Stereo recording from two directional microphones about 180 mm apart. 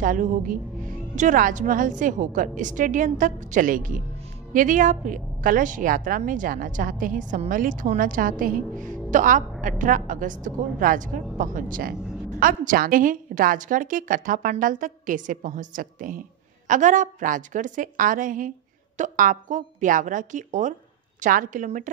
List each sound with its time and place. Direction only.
0.0 s a woman's voice: 50° right (ahead or behind)